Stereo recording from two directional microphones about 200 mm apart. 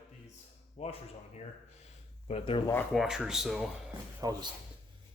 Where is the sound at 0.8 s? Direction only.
30° left (ahead or behind).